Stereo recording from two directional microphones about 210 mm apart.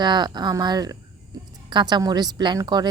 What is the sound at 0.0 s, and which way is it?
Speech, 20° right (ahead or behind).